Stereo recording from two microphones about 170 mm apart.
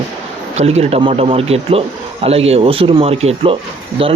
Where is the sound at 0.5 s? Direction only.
40° right (ahead or behind).